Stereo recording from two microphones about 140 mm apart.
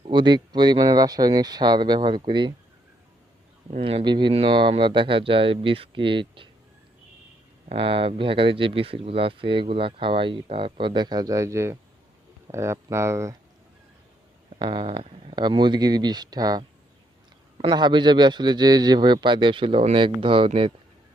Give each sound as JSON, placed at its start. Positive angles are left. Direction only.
{"t": 0.1, "sound": "speech", "side_deg": -35}
{"t": 3.7, "sound": "speech", "side_deg": -40}
{"t": 7.7, "sound": "speech", "side_deg": -40}
{"t": 14.6, "sound": "speech", "side_deg": -35}